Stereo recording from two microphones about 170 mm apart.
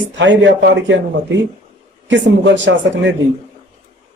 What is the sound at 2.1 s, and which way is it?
Speech, 90° right.